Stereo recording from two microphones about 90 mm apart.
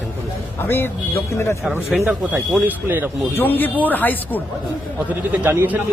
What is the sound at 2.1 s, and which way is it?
Speech, 15° right (ahead or behind).